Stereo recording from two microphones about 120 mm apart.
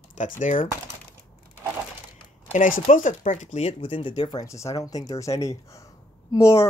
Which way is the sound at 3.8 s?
45° left (ahead or behind).